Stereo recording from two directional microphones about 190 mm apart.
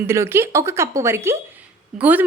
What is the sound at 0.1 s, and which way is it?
A woman's voice, 15° right (ahead or behind).